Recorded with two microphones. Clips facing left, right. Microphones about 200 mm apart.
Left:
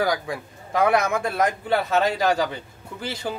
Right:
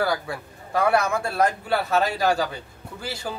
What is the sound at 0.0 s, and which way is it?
Speech, 15° left (ahead or behind).